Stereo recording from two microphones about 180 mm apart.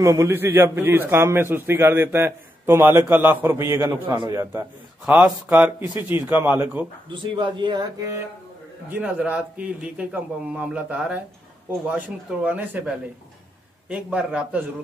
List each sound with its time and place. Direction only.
0.0 s a man's voice: 15° right (ahead or behind)
4.1 s speech: 25° right (ahead or behind)
4.4 s a man's voice: 10° right (ahead or behind)
7.1 s speech: 25° right (ahead or behind)
8.8 s a man's voice: 10° right (ahead or behind)
12.4 s a man's voice: 10° right (ahead or behind)